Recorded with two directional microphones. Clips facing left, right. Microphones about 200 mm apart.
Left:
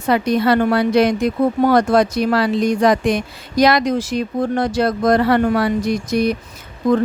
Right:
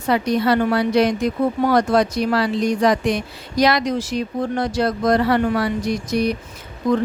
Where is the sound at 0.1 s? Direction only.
60° left (ahead or behind).